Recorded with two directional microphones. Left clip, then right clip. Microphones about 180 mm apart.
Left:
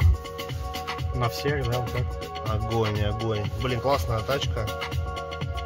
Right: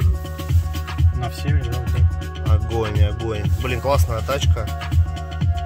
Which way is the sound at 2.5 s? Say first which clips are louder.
Right 3 dB; 10° right (ahead or behind).